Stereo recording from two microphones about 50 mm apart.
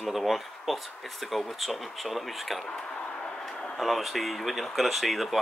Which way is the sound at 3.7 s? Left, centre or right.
Centre.